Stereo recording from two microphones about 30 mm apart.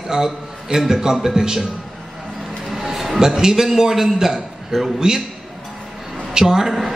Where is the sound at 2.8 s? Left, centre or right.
Centre.